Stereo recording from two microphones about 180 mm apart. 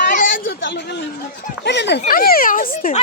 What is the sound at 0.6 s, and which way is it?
Speech, 85° left.